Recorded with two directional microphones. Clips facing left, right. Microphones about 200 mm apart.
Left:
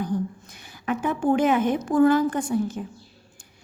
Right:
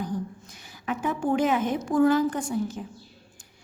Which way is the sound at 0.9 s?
55° left (ahead or behind).